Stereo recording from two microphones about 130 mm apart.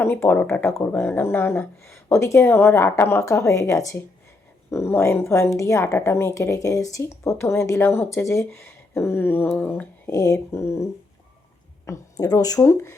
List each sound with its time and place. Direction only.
0.0 s a woman's voice: 15° left (ahead or behind)
11.9 s a woman's voice: 30° left (ahead or behind)